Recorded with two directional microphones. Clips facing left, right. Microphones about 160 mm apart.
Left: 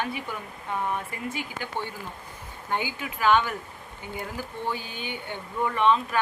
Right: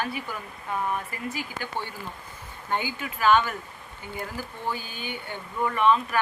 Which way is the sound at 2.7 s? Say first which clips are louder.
Even; 15° left (ahead or behind).